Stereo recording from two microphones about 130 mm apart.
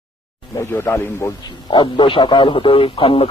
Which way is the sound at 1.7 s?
40° left (ahead or behind).